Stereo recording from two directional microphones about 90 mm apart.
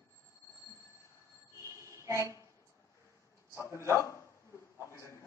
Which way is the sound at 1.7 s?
35° right (ahead or behind).